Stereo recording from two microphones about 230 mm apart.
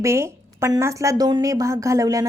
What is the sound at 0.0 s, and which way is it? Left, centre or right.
A woman's voice, centre.